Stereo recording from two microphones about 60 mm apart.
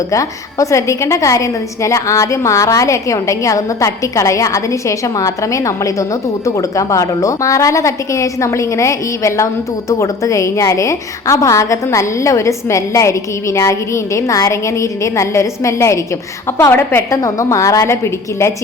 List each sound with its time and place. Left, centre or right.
0.1 s a woman's voice: left
16.7 s a woman's voice: left
17.2 s a woman's voice: left